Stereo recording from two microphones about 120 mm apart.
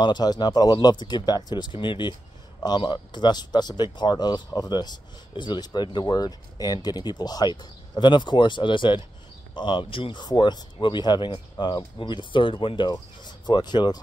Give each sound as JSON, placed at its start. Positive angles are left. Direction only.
{"t": 0.0, "sound": "speech", "side_deg": 35}